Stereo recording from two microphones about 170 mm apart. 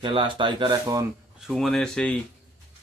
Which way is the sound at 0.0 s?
30° right (ahead or behind).